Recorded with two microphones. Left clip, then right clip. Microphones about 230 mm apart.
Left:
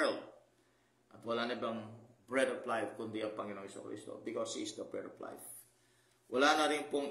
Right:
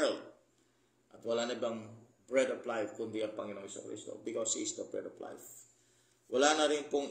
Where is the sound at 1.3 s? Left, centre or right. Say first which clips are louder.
Right 2 dB; centre.